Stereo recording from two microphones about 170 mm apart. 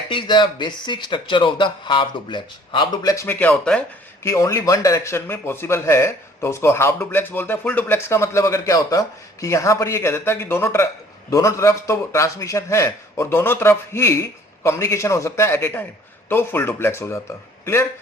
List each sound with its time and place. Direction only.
0.1 s speech: 30° left (ahead or behind)